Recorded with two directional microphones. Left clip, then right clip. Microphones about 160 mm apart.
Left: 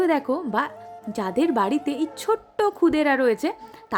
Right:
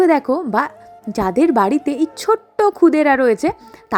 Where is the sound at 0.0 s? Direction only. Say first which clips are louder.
Right 8 dB; 40° right (ahead or behind).